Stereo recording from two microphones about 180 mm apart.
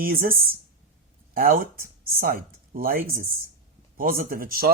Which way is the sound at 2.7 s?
50° right (ahead or behind).